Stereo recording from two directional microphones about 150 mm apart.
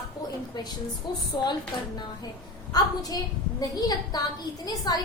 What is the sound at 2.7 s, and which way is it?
A woman's voice, 25° left (ahead or behind).